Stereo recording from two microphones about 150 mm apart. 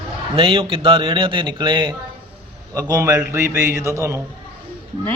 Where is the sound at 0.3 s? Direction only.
40° right (ahead or behind); by 4.2 s 20° right (ahead or behind).